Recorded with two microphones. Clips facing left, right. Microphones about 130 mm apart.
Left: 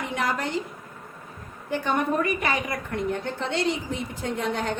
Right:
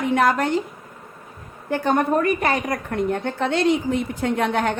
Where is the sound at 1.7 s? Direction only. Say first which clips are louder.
Right 5 dB; 45° right (ahead or behind); by 4.8 s 70° right (ahead or behind).